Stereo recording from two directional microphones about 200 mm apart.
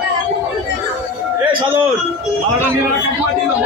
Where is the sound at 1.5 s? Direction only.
25° right (ahead or behind).